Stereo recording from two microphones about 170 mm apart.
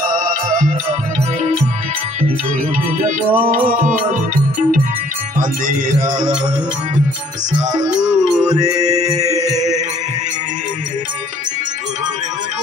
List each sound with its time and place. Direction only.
0.0 s music: 55° right (ahead or behind)
3.0 s music: 50° right (ahead or behind)
6.0 s music: 25° right (ahead or behind)
7.8 s music: 25° right (ahead or behind)